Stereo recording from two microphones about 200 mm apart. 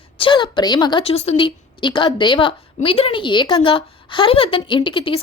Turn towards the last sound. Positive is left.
turn(degrees=25)  # may be behind; listen again after turning